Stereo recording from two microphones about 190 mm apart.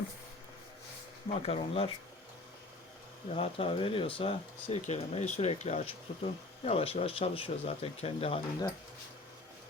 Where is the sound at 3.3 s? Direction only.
30° left (ahead or behind).